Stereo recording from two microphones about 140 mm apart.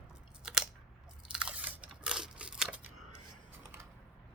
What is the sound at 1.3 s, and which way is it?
Crunch, 5° right (ahead or behind).